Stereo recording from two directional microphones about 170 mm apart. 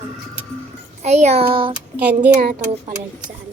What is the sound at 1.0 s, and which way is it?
Child singing, 40° right (ahead or behind).